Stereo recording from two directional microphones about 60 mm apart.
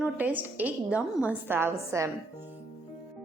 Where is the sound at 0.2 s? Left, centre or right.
Right.